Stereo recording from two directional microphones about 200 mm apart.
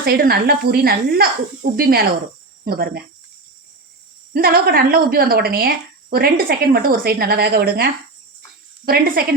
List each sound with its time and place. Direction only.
0.0 s a woman's voice: 50° right (ahead or behind)
4.4 s a woman's voice: 45° right (ahead or behind)